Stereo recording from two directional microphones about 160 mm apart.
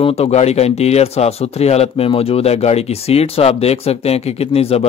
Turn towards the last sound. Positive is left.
turn(degrees=40)  # may be behind; listen again after turning